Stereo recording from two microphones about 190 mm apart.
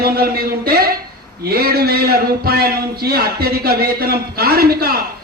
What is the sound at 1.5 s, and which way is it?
A man's voice, 55° right (ahead or behind).